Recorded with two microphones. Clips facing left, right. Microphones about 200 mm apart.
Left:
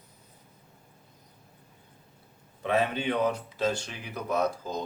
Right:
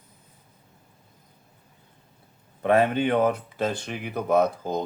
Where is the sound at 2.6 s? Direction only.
55° right (ahead or behind).